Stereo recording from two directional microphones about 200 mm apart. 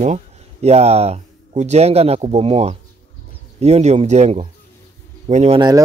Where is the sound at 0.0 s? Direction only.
35° right (ahead or behind).